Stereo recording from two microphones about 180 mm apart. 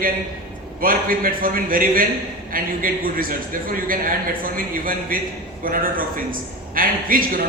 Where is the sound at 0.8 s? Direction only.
50° right (ahead or behind).